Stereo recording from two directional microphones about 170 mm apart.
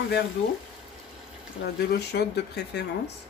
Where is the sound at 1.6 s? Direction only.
70° left (ahead or behind).